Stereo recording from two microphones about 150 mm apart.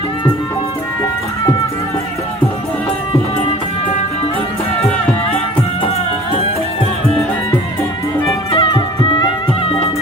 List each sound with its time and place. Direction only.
8.5 s music: 30° left (ahead or behind)